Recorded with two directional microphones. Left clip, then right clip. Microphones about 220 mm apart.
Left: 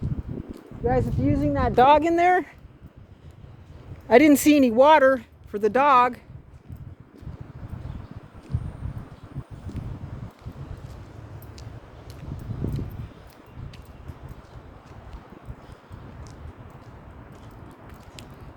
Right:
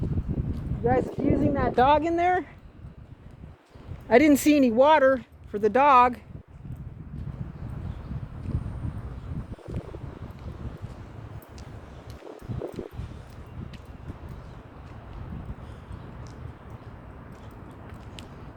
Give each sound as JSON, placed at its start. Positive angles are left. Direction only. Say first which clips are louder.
{"t": 0.9, "sound": "speech", "louder": "left 1 dB", "side_deg": 0}
{"t": 1.5, "sound": "speech", "louder": "left 5 dB", "side_deg": 35}
{"t": 4.1, "sound": "speech", "louder": "left 3 dB", "side_deg": 20}
{"t": 9.7, "sound": "wind", "louder": "right 2 dB", "side_deg": 0}